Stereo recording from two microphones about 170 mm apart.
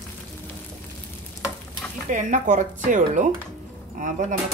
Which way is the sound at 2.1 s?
50° right (ahead or behind).